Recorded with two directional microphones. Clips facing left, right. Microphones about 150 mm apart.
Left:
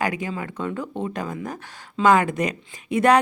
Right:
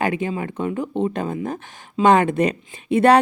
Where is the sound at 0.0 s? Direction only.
25° right (ahead or behind).